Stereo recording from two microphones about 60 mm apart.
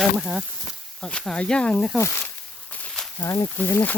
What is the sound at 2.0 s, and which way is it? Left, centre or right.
Speech, left.